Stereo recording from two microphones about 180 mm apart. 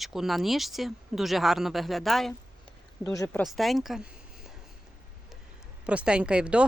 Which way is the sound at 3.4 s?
Centre (ahead or behind).